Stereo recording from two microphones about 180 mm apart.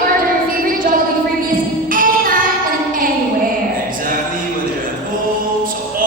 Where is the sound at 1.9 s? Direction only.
50° right (ahead or behind).